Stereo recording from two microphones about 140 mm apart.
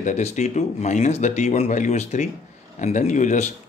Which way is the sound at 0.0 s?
55° left (ahead or behind).